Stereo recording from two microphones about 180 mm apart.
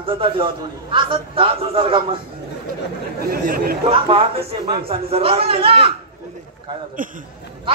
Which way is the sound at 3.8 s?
30° right (ahead or behind).